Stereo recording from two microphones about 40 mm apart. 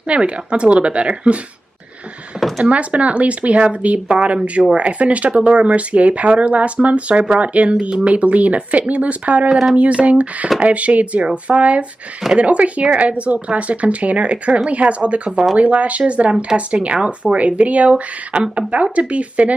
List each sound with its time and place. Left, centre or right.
0.1 s speech: right
2.6 s speech: right
9.5 s speech: centre
9.8 s speech: right